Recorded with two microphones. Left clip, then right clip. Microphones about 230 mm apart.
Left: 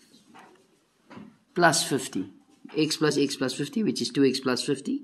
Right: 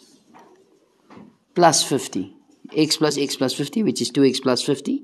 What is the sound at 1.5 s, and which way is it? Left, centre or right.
Speech, right.